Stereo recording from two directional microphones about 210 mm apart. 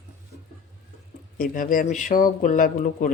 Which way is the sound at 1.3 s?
40° left (ahead or behind).